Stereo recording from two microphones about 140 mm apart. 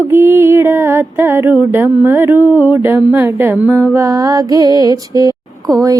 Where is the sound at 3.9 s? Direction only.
25° right (ahead or behind).